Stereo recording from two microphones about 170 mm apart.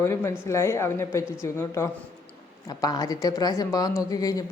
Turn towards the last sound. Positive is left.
turn(degrees=20)  # may be behind; listen again after turning